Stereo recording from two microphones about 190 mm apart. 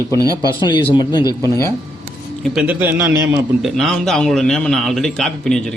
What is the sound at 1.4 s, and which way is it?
Speech, 15° right (ahead or behind).